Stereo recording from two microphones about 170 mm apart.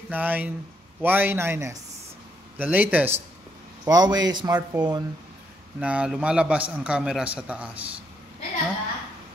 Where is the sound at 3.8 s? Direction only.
25° right (ahead or behind).